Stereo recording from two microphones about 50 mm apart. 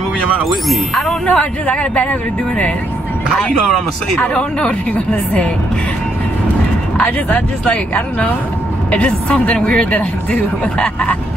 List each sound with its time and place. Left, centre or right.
1.2 s speech: left
4.3 s speech: centre
7.0 s speech: left